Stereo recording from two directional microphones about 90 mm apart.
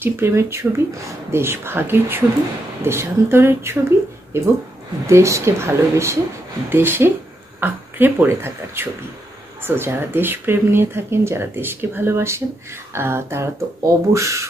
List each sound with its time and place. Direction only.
0.0 s speech: 25° right (ahead or behind)